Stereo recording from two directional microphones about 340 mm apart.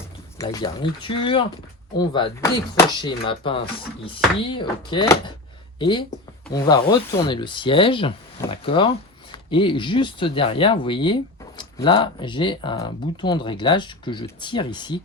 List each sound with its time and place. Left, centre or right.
0.3 s speech: centre